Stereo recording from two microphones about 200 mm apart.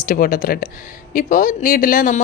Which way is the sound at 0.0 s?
45° left (ahead or behind).